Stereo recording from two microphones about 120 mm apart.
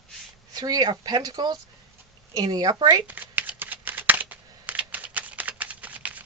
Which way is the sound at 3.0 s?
15° right (ahead or behind).